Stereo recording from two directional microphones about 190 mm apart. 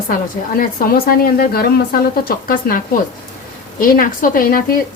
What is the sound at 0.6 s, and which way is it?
A woman's voice, 50° left (ahead or behind).